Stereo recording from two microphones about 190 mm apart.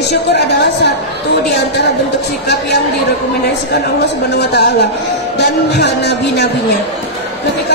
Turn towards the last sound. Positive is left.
turn(degrees=60)  # may be behind; listen again after turning